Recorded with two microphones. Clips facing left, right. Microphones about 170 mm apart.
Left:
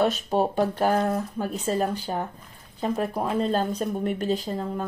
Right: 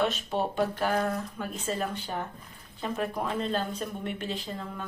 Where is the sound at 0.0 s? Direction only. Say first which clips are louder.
Left 5 dB; 40° left (ahead or behind).